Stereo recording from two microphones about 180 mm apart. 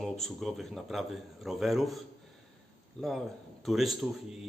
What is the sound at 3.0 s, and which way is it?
Speech, 5° left (ahead or behind).